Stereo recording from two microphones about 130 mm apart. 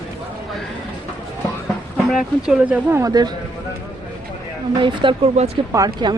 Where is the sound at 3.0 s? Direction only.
30° right (ahead or behind).